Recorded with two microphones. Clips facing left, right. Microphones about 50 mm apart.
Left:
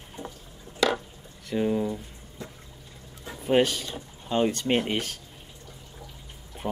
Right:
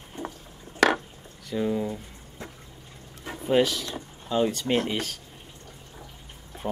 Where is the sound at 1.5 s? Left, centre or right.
Left.